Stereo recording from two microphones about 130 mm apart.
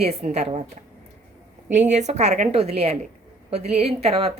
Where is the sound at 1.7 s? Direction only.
65° right (ahead or behind).